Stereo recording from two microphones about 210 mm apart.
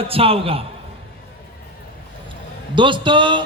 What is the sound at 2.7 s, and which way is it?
Speech, 25° right (ahead or behind).